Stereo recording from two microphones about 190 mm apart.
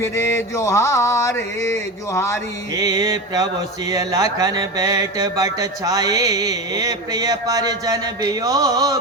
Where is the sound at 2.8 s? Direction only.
20° right (ahead or behind).